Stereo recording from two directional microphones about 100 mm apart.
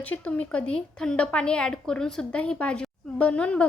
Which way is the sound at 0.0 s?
15° left (ahead or behind).